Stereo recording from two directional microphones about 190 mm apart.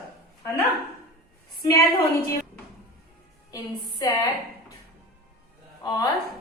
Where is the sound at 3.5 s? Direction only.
20° left (ahead or behind).